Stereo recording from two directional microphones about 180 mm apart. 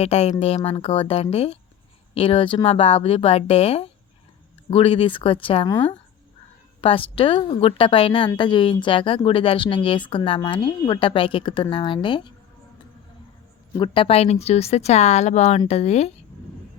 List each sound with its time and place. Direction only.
0.0 s speech: 35° left (ahead or behind)
6.8 s speech: 30° left (ahead or behind)
13.7 s speech: 30° left (ahead or behind)